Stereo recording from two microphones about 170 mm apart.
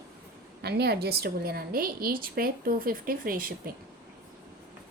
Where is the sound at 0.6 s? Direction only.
70° right (ahead or behind).